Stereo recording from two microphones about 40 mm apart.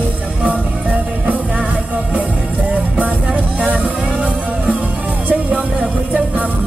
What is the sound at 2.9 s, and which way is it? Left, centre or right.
Music, right.